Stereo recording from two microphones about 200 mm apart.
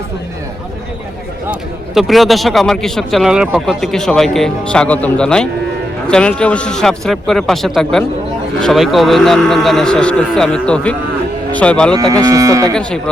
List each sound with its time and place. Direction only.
2.0 s speech: centre (ahead or behind)
11.9 s moo: 15° right (ahead or behind)